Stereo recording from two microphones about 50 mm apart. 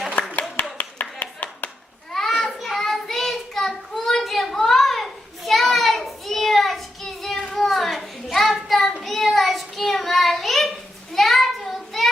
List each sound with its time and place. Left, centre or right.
0.2 s clapping: left
2.4 s child singing: centre
11.1 s a sound: centre